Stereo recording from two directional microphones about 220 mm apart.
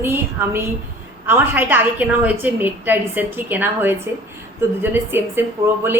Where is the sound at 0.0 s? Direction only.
10° right (ahead or behind).